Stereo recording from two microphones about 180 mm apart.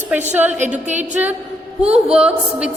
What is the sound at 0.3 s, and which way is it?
A woman's voice, 10° right (ahead or behind).